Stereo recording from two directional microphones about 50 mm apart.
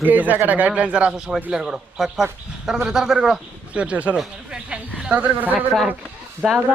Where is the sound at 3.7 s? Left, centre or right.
Right.